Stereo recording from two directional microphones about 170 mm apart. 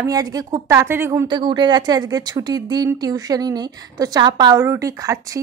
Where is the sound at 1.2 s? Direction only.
25° right (ahead or behind).